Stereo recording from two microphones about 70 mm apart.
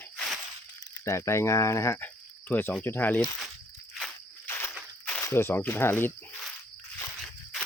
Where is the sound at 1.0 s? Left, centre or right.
Left.